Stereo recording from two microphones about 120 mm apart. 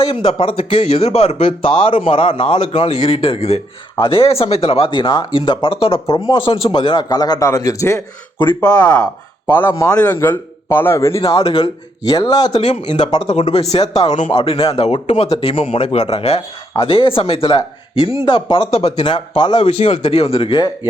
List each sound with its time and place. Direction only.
0.0 s speech: 45° left (ahead or behind)
3.9 s speech: 45° left (ahead or behind)
6.1 s a man's voice: 30° left (ahead or behind)
6.3 s a man's voice: 45° left (ahead or behind); by 8.0 s 25° left (ahead or behind)
8.8 s a man's voice: 10° left (ahead or behind)
11.5 s speech: 35° left (ahead or behind)
13.2 s speech: 60° left (ahead or behind)
14.3 s speech: 50° left (ahead or behind)
16.8 s speech: 45° left (ahead or behind)
19.0 s speech: 40° left (ahead or behind)
19.6 s speech: 60° left (ahead or behind)